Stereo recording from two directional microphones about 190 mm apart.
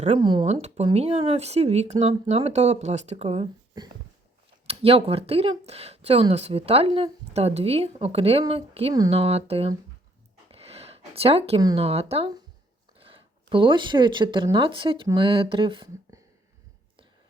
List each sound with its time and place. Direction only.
0.2 s speech: 25° right (ahead or behind)
4.6 s speech: 30° right (ahead or behind)
10.5 s a sound: 30° right (ahead or behind)
11.6 s speech: 30° right (ahead or behind)